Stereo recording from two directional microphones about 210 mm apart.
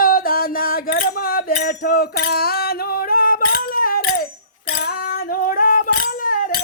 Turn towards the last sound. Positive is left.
turn(degrees=40)  # may be behind; listen again after turning